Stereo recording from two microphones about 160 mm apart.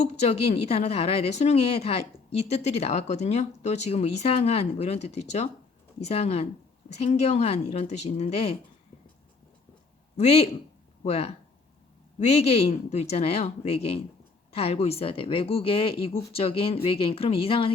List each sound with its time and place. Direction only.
0.0 s a woman's voice: 40° left (ahead or behind)
10.2 s a woman's voice: 40° left (ahead or behind)